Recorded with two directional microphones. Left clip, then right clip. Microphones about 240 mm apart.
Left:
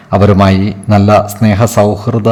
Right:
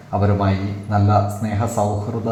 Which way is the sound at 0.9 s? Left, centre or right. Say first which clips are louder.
Left 10 dB; left.